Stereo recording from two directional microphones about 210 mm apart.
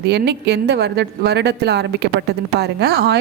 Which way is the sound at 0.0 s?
50° right (ahead or behind).